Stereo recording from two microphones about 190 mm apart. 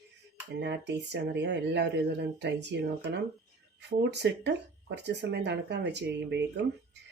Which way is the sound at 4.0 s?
65° right (ahead or behind).